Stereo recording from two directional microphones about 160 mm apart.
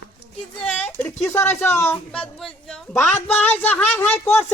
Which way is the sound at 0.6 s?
10° left (ahead or behind).